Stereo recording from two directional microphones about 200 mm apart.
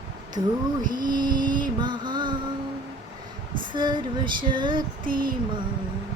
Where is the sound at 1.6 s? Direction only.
20° right (ahead or behind).